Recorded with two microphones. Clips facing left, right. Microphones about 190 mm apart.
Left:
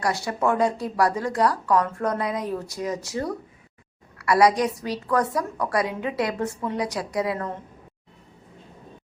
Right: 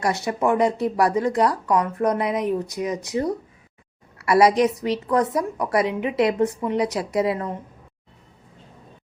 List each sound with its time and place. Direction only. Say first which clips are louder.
0.0 s a woman's voice: right 2 dB; 20° right (ahead or behind)